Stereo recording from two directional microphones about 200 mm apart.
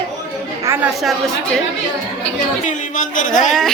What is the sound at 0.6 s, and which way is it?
Chatter, 15° right (ahead or behind).